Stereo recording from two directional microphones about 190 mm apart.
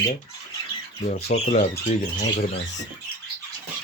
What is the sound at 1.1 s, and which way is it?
Speech, 40° left (ahead or behind).